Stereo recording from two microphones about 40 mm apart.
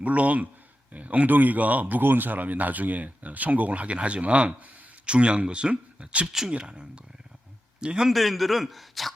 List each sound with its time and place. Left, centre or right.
0.0 s speech: right
2.0 s a man's voice: right
8.0 s a man's voice: centre